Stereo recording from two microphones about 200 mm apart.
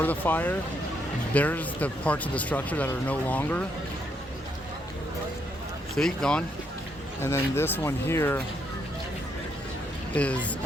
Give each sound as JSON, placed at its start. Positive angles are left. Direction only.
{"t": 0.0, "sound": "speech", "side_deg": 10}
{"t": 6.0, "sound": "speech", "side_deg": 5}
{"t": 10.2, "sound": "speech", "side_deg": 5}